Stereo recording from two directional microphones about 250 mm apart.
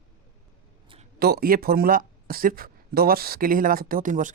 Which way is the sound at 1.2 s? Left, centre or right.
Right.